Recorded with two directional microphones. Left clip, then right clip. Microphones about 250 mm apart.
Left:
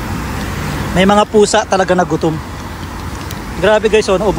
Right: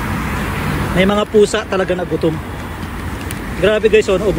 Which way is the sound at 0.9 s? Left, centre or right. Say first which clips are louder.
Left 3 dB; centre.